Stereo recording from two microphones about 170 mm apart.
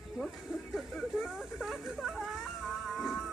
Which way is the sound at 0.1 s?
Centre (ahead or behind).